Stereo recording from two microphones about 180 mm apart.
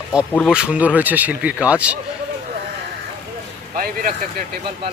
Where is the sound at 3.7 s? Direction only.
50° right (ahead or behind).